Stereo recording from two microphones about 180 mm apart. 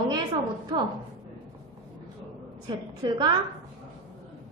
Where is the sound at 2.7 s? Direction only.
25° right (ahead or behind).